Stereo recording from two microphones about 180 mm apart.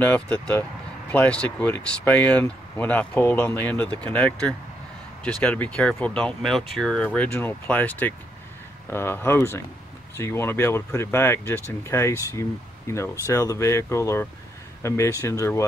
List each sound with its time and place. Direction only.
0.0 s speech: 10° left (ahead or behind)